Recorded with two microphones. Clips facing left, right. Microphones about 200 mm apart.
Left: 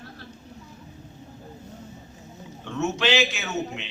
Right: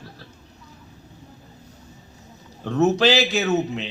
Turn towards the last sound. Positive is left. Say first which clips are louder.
# right 9 dB
turn(degrees=-35)  # may be behind; listen again after turning